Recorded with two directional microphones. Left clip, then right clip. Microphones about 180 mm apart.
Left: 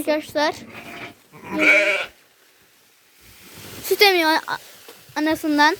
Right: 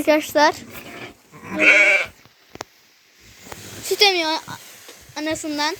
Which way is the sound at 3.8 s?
35° left (ahead or behind).